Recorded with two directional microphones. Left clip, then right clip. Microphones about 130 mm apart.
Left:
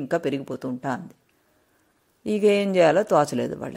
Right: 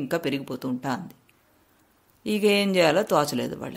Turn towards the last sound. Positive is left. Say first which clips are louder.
# left 3 dB
turn(degrees=40)  # may be behind; listen again after turning